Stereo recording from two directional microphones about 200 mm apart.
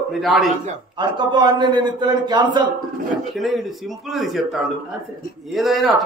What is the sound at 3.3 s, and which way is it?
A man's voice, centre (ahead or behind).